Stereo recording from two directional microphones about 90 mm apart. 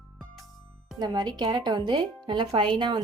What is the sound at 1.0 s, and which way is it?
Speech, 50° right (ahead or behind).